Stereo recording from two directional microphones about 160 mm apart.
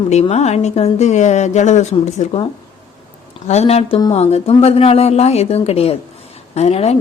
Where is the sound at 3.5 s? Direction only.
45° left (ahead or behind).